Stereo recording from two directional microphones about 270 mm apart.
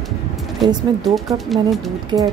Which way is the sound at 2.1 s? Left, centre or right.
Centre.